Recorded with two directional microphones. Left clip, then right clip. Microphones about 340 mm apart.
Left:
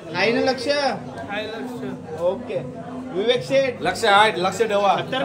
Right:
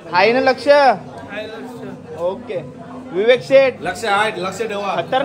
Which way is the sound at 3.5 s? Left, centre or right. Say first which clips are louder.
Right 7 dB; centre.